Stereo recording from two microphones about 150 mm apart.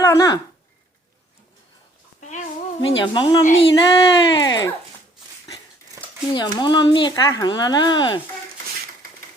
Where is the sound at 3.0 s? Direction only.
30° left (ahead or behind).